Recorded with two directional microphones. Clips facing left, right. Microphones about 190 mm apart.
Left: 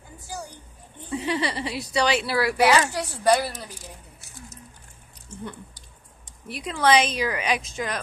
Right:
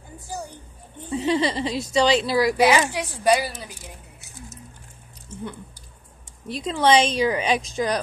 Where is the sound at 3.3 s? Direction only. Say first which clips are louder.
Right 1 dB; 5° right (ahead or behind).